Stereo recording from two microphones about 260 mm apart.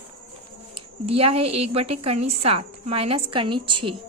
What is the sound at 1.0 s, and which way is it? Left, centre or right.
A woman's voice, right.